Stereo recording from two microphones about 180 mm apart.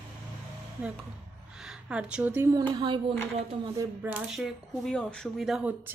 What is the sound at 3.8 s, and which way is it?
Speech, 10° right (ahead or behind).